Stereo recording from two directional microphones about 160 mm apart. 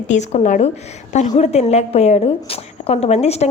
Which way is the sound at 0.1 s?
45° left (ahead or behind).